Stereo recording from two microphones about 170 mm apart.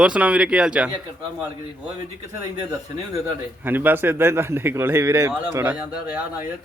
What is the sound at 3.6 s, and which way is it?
A man's voice, 10° right (ahead or behind).